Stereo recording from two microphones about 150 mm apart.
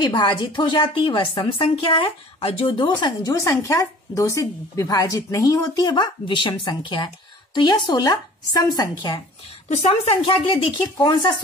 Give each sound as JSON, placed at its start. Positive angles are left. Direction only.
{"t": 0.0, "sound": "a woman's voice", "side_deg": 30}
{"t": 3.3, "sound": "a woman's voice", "side_deg": 20}
{"t": 9.7, "sound": "a woman's voice", "side_deg": 45}